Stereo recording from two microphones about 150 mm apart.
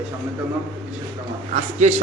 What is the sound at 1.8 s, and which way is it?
Speech, 50° right (ahead or behind).